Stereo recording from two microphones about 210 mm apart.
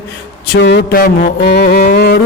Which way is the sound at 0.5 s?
55° left (ahead or behind).